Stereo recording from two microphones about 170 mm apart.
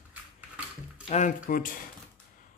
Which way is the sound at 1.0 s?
45° left (ahead or behind).